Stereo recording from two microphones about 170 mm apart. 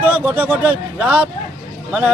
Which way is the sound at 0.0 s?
10° right (ahead or behind).